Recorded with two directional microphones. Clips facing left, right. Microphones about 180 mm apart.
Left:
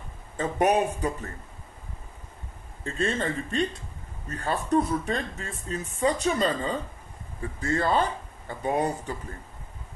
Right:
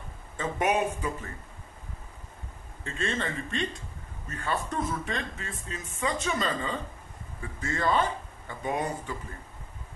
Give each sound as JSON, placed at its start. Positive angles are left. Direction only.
{"t": 0.4, "sound": "speech", "side_deg": 40}
{"t": 2.8, "sound": "speech", "side_deg": 40}